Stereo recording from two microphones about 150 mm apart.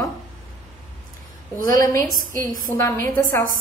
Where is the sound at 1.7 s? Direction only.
25° left (ahead or behind).